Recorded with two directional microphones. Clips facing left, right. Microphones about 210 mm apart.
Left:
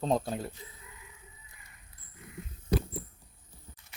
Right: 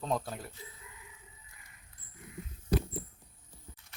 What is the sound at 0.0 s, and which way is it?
Speech, 30° left (ahead or behind).